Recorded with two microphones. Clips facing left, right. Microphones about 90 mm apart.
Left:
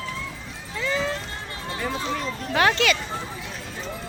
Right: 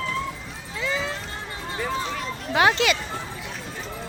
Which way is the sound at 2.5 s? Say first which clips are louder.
Right 1 dB; 15° right (ahead or behind).